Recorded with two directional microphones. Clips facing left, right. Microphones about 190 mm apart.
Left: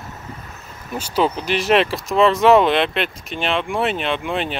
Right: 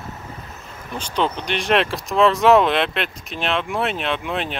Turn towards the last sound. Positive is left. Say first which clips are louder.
# left 2 dB
turn(degrees=0)  # may be behind; listen again after turning